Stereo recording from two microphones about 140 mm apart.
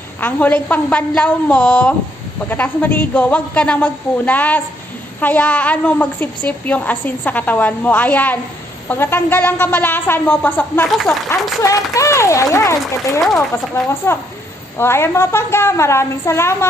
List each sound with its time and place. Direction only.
0.2 s a woman's voice: 10° left (ahead or behind)